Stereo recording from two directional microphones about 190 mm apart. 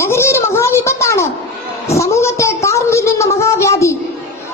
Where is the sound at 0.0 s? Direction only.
15° left (ahead or behind).